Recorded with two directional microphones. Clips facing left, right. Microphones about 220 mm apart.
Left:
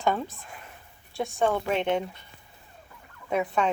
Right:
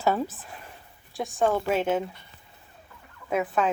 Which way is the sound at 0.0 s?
5° right (ahead or behind).